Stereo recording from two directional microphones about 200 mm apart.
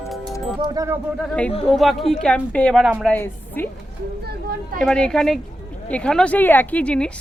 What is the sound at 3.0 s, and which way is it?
Speech, 10° left (ahead or behind).